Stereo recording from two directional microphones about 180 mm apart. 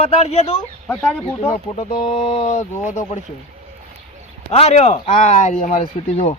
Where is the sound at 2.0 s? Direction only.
30° left (ahead or behind).